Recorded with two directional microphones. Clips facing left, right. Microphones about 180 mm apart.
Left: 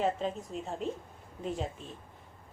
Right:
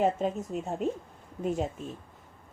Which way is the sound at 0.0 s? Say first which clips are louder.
Right 4 dB; 45° right (ahead or behind).